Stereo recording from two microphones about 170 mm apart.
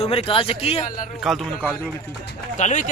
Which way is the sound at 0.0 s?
35° left (ahead or behind).